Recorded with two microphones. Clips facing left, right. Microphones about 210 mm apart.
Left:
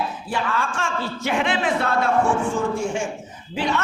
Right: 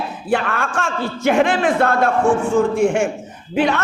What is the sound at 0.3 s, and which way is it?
A man's voice, 65° right (ahead or behind).